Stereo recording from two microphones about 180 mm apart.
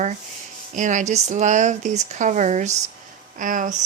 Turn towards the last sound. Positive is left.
turn(degrees=-45)  # may be behind; listen again after turning